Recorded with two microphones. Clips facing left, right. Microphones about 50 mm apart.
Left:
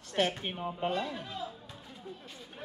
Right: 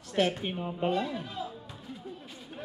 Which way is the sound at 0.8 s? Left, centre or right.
Centre.